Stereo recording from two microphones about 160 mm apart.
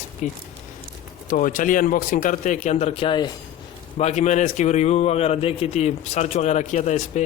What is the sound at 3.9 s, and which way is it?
A man's voice, 45° left (ahead or behind).